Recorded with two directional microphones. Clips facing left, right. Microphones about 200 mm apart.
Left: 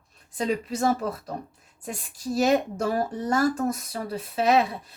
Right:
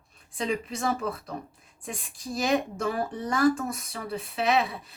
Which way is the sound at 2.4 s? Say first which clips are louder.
Left 3 dB; 40° left (ahead or behind).